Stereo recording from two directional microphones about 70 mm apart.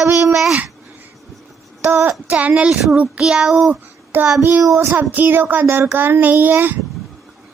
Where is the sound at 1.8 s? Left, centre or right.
Right; by 3.7 s centre.